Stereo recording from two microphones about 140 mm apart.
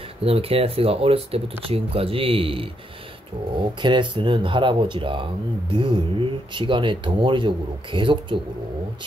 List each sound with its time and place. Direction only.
0.2 s speech: 45° right (ahead or behind)